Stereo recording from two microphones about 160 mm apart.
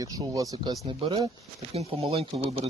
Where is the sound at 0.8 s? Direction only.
35° right (ahead or behind).